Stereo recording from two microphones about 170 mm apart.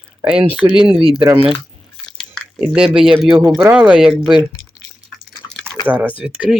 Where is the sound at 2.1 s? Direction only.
5° left (ahead or behind).